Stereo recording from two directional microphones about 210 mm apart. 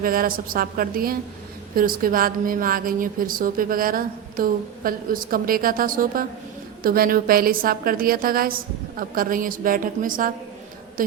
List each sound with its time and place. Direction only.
0.0 s a woman's voice: 45° right (ahead or behind)